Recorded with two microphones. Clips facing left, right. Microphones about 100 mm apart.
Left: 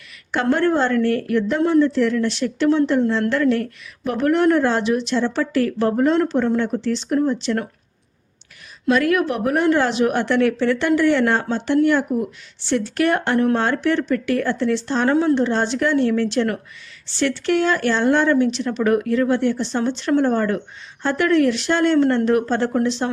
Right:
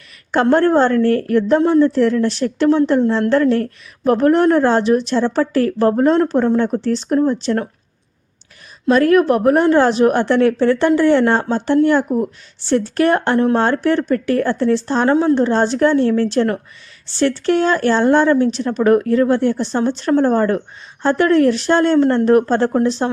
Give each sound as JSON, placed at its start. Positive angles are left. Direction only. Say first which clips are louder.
{"t": 0.5, "sound": "a woman's voice", "louder": "right 4 dB", "side_deg": -40}
{"t": 8.9, "sound": "a woman's voice", "louder": "right 6 dB", "side_deg": -40}
{"t": 15.4, "sound": "a woman's voice", "louder": "right 5 dB", "side_deg": -40}